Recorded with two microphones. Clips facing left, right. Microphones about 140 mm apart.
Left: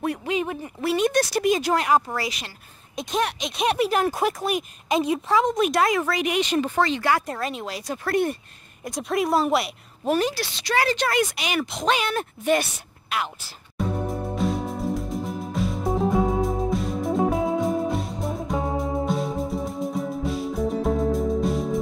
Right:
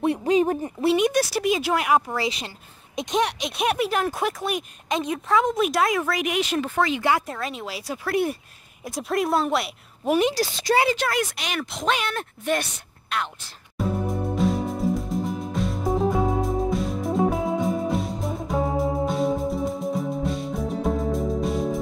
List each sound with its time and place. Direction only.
0.0 s speech: 30° right (ahead or behind)
0.7 s speech: 20° right (ahead or behind)
1.0 s speech: 5° right (ahead or behind)
2.2 s speech: 30° right (ahead or behind)
3.0 s speech: 15° right (ahead or behind)
7.0 s speech: 20° right (ahead or behind)
7.2 s speech: centre (ahead or behind)
10.3 s speech: 40° right (ahead or behind)
10.9 s speech: centre (ahead or behind)
13.7 s music: centre (ahead or behind)